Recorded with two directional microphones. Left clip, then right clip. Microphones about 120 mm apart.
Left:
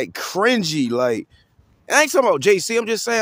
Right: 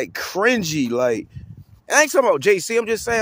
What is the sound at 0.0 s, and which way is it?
Speech, 25° left (ahead or behind).